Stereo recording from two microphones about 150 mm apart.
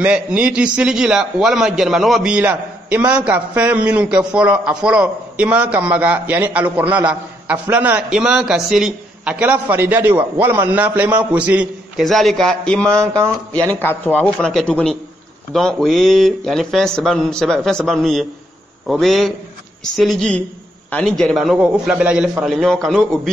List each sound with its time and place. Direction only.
0.0 s a man's voice: 5° right (ahead or behind)
22.4 s a man's voice: 5° left (ahead or behind)